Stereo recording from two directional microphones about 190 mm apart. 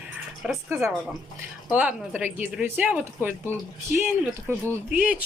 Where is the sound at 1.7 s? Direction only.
10° right (ahead or behind).